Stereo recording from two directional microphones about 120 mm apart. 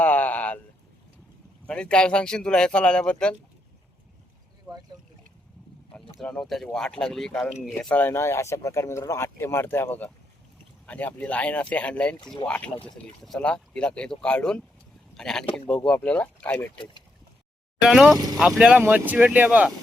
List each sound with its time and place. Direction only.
0.0 s a sound: 15° left (ahead or behind)
1.6 s speech: 10° left (ahead or behind)
6.1 s speech: 5° left (ahead or behind)
17.8 s speech: 5° right (ahead or behind)